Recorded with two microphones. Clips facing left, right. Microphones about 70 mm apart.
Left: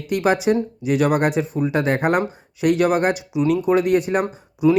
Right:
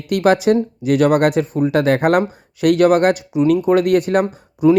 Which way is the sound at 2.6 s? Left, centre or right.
Right.